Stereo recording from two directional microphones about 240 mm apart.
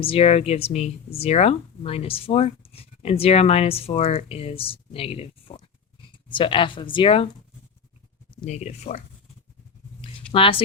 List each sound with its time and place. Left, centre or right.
0.0 s speech: left
8.4 s speech: left
10.3 s speech: left